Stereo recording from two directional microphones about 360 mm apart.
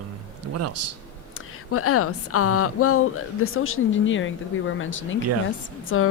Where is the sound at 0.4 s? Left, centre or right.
Right.